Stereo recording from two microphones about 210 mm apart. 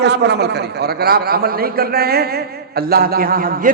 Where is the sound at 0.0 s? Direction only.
55° right (ahead or behind).